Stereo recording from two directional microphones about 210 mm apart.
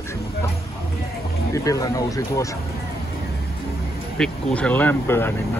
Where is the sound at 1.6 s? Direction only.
15° left (ahead or behind).